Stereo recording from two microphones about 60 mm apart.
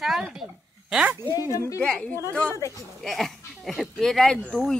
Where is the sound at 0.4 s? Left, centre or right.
Centre.